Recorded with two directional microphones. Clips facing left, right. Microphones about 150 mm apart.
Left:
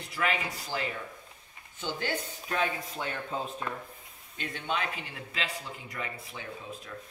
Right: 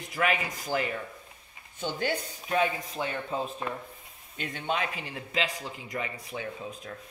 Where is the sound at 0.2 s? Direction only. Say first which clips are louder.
Right 3 dB; 45° right (ahead or behind).